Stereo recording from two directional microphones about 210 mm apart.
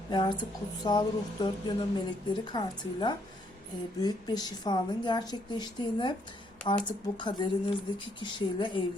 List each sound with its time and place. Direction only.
0.1 s a woman's voice: 20° left (ahead or behind)